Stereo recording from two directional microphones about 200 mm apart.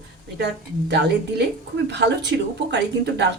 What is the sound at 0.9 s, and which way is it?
Speech, 55° right (ahead or behind).